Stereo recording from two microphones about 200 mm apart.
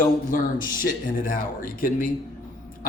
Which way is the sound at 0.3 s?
45° left (ahead or behind).